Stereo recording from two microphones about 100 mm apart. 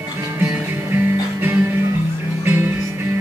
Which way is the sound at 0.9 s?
20° right (ahead or behind).